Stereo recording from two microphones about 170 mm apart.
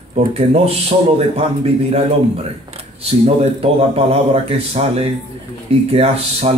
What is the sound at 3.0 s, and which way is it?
Speech, 35° right (ahead or behind).